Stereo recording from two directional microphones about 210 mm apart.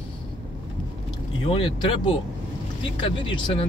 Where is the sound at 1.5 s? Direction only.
25° left (ahead or behind).